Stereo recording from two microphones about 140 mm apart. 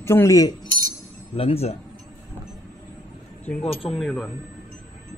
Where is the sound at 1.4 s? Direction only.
45° left (ahead or behind).